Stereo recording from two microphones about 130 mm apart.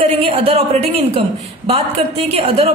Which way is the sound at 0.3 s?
45° right (ahead or behind).